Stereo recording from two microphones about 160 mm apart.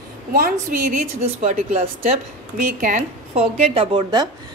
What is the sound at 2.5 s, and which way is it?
A woman's voice, 50° right (ahead or behind).